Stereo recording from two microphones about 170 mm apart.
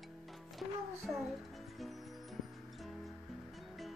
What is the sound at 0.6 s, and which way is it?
Speech, centre (ahead or behind).